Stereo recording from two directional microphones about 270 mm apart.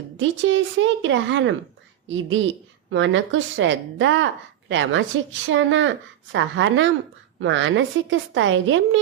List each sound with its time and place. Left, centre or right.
0.2 s a woman's voice: right